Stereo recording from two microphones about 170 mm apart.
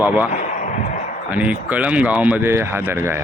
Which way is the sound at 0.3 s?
45° left (ahead or behind).